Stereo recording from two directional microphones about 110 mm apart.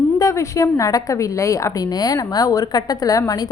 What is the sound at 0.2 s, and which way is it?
A woman's voice, 25° left (ahead or behind).